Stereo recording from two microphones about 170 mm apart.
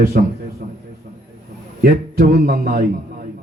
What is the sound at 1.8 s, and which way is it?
Speech, 65° right (ahead or behind).